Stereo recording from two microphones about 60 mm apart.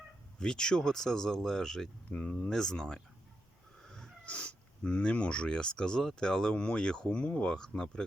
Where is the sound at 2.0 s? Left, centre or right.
Left.